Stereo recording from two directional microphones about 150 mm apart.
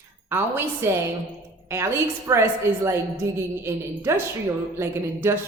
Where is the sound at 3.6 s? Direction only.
15° right (ahead or behind).